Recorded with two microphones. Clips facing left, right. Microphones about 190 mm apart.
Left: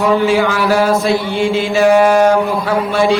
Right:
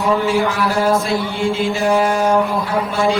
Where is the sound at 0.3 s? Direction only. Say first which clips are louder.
Left 4 dB; 90° left.